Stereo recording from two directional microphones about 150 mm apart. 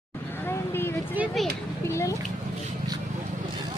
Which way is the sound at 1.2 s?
10° right (ahead or behind).